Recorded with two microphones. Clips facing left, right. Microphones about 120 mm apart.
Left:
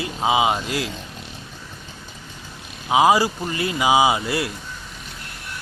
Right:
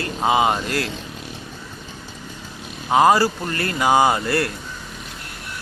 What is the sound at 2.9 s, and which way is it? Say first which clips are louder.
Speech: right 1 dB; 5° left (ahead or behind).